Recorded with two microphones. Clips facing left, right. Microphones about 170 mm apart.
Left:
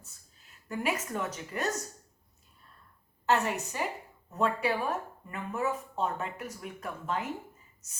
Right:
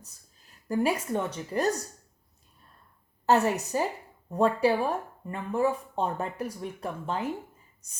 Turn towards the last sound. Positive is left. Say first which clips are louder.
# right 3 dB
turn(degrees=-30)  # may be behind; listen again after turning